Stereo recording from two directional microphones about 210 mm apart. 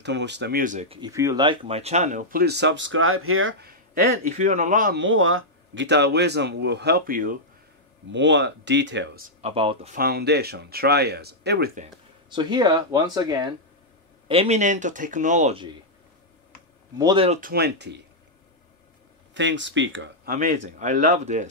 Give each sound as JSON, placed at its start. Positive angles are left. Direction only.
{"t": 0.0, "sound": "speech", "side_deg": -55}
{"t": 1.0, "sound": "speech", "side_deg": -15}
{"t": 3.6, "sound": "a man's voice", "side_deg": -45}
{"t": 4.9, "sound": "speech", "side_deg": -65}
{"t": 8.1, "sound": "speech", "side_deg": -60}
{"t": 9.4, "sound": "speech", "side_deg": -25}
{"t": 9.9, "sound": "speech", "side_deg": -45}
{"t": 12.3, "sound": "a man's voice", "side_deg": -20}
{"t": 17.0, "sound": "speech", "side_deg": -25}
{"t": 17.4, "sound": "speech", "side_deg": -45}
{"t": 19.3, "sound": "speech", "side_deg": -60}
{"t": 20.2, "sound": "a man's voice", "side_deg": -40}